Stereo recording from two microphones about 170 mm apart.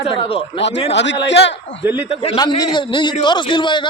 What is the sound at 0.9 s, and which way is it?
Speech, 90° left.